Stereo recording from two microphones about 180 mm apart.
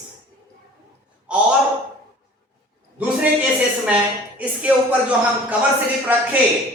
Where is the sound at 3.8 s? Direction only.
10° right (ahead or behind).